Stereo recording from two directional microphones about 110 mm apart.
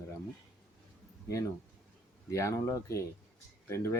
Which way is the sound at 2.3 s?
25° left (ahead or behind).